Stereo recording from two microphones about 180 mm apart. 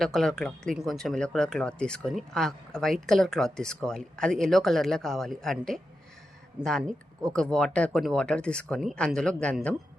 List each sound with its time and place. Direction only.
0.0 s speech: centre (ahead or behind)